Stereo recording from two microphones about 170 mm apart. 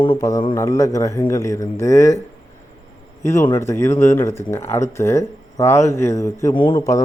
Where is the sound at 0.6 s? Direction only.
20° left (ahead or behind).